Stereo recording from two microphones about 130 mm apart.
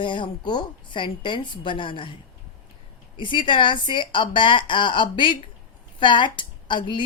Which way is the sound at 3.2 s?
40° left (ahead or behind).